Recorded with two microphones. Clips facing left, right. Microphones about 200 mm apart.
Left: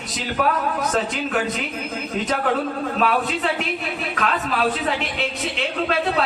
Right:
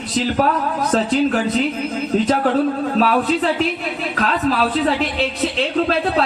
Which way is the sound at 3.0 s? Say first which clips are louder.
Right 4 dB; 35° right (ahead or behind).